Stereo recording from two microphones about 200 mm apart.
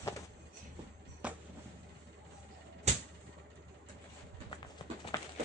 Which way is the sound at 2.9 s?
35° right (ahead or behind).